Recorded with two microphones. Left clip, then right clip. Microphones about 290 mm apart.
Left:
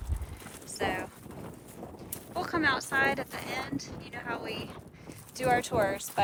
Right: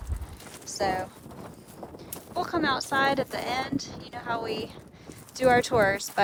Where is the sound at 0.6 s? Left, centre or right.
Centre.